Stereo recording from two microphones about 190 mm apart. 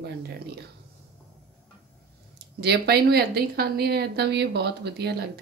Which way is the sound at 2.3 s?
60° right (ahead or behind).